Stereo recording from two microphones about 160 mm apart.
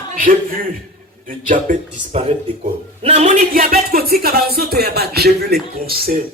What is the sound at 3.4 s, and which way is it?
Speech, 60° right (ahead or behind).